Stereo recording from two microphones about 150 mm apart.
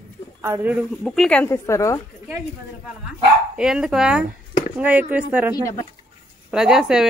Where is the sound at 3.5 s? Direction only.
5° right (ahead or behind).